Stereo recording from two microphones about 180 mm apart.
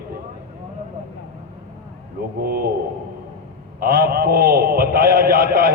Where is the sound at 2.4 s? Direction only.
55° right (ahead or behind).